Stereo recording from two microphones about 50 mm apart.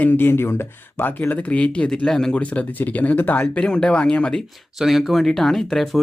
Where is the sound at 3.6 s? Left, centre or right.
Centre.